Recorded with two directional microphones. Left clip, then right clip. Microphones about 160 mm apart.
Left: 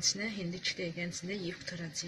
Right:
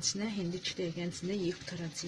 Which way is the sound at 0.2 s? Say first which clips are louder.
Even; 35° right (ahead or behind).